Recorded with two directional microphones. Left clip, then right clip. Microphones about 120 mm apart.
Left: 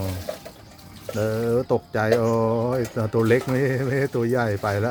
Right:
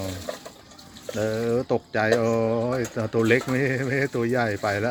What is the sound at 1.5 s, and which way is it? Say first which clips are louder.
Speech: left 2 dB; 15° left (ahead or behind).